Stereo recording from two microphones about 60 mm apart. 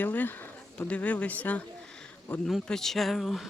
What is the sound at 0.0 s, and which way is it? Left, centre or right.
Speech, left.